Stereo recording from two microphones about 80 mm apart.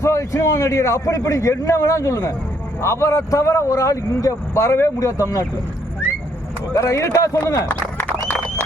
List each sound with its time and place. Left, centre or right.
0.0 s a man's voice: left
6.7 s speech: left
7.7 s a sound: centre